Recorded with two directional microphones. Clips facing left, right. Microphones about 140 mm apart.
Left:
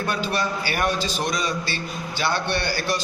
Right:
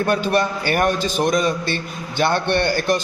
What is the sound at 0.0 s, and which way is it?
A man's voice, 50° right (ahead or behind).